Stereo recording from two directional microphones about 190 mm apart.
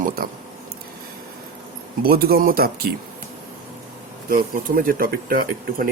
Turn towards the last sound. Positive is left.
turn(degrees=-50)  # may be behind; listen again after turning